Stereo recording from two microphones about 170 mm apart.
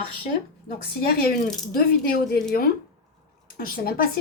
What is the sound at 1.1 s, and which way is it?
A woman's voice, 65° left (ahead or behind).